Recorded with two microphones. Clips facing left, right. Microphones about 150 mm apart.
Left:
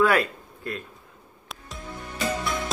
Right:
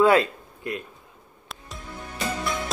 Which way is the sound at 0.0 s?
20° right (ahead or behind).